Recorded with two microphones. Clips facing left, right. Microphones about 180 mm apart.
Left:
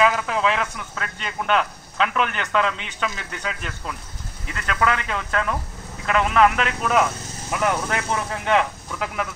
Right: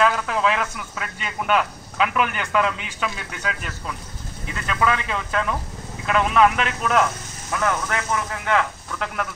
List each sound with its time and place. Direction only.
0.0 s speech: centre (ahead or behind)
7.9 s speech: 30° left (ahead or behind)
9.0 s speech: 5° left (ahead or behind)